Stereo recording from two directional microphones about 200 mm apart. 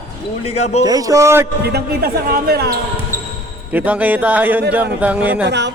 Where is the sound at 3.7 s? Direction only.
10° right (ahead or behind).